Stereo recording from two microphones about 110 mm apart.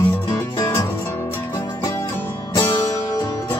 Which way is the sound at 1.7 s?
25° left (ahead or behind).